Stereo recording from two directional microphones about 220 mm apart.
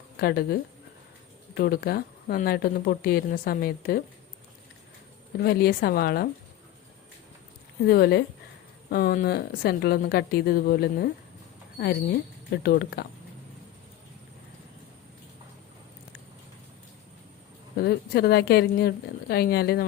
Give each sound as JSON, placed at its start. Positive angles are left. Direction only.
{"t": 0.2, "sound": "speech", "side_deg": 45}
{"t": 5.4, "sound": "speech", "side_deg": 45}
{"t": 7.9, "sound": "speech", "side_deg": 45}
{"t": 17.7, "sound": "speech", "side_deg": 45}